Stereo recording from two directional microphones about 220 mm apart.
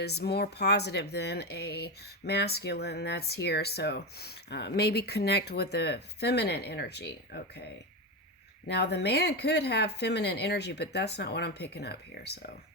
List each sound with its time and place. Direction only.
0.0 s speech: 45° left (ahead or behind)
8.7 s speech: 50° left (ahead or behind)